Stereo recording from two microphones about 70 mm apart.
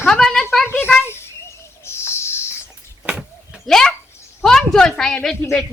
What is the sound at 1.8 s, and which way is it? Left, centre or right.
Bird, left.